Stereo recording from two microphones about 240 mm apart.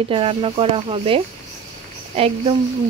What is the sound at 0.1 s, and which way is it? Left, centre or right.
Speech, right.